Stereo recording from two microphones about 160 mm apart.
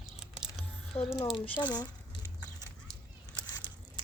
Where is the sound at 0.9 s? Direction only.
40° left (ahead or behind).